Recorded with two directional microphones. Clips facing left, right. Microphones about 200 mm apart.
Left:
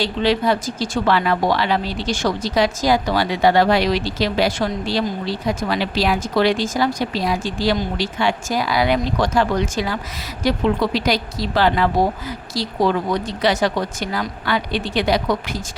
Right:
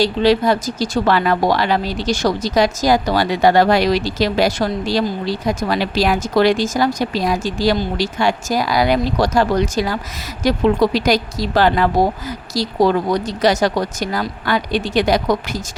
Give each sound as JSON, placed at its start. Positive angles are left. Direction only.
{"t": 0.0, "sound": "a woman's voice", "side_deg": -40}